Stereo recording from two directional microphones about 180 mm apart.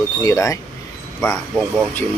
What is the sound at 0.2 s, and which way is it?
Speech, 15° left (ahead or behind).